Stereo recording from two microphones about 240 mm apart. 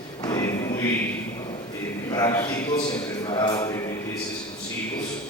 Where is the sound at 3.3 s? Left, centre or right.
Centre.